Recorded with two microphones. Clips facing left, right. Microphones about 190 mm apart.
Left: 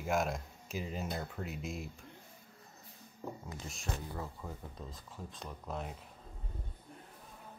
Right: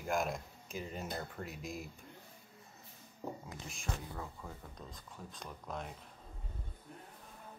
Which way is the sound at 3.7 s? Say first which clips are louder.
Left 1 dB; centre (ahead or behind).